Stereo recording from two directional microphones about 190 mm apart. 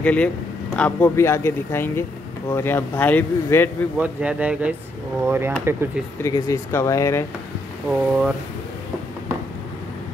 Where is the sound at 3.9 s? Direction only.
10° right (ahead or behind).